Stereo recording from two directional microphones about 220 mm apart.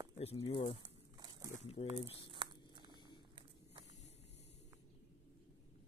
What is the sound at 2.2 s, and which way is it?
Crumpling, 20° right (ahead or behind).